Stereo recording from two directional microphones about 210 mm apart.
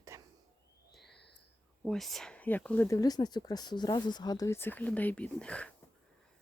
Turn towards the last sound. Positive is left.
turn(degrees=5)  # may be behind; listen again after turning